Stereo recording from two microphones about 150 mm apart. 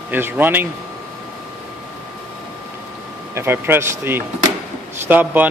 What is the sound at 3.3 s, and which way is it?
A man's voice, 15° right (ahead or behind).